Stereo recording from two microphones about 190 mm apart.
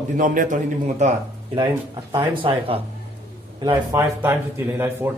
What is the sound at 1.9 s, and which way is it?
A man's voice, 25° right (ahead or behind).